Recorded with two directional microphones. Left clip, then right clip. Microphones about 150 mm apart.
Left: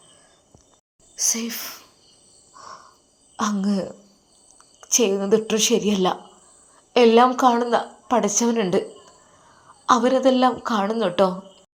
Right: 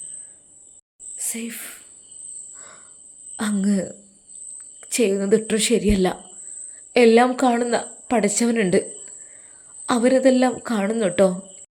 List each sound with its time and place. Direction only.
1.2 s speech: 5° right (ahead or behind)
1.5 s speech: 20° right (ahead or behind)
2.6 s cricket: 30° right (ahead or behind)
3.3 s a woman's voice: 40° right (ahead or behind); by 8.8 s 65° right (ahead or behind)
9.8 s a woman's voice: 55° right (ahead or behind)